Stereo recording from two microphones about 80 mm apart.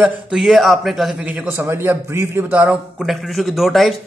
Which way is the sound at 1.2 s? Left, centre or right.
Centre.